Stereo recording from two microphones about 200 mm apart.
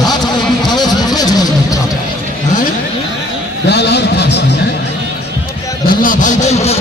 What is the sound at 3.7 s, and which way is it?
Speech, 55° left (ahead or behind).